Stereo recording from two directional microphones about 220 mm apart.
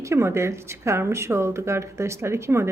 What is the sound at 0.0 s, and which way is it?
Speech, 10° right (ahead or behind).